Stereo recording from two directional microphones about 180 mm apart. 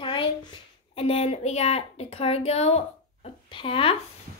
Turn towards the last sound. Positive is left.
turn(degrees=30)  # may be behind; listen again after turning